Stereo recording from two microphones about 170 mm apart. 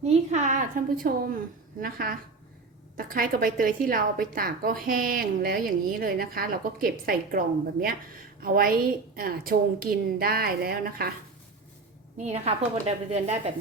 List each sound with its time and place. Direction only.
0.0 s a woman's voice: 40° right (ahead or behind); by 11.0 s 60° right (ahead or behind)
12.1 s a woman's voice: 40° right (ahead or behind)